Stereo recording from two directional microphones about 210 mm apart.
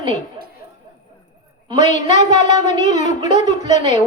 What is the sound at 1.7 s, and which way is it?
A woman's voice, 35° left (ahead or behind).